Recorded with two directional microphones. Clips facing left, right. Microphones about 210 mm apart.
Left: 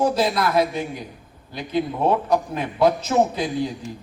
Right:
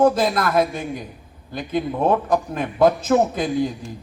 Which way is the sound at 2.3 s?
50° right (ahead or behind).